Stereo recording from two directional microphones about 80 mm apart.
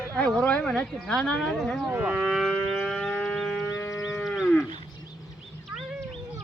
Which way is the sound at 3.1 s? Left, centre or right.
Centre.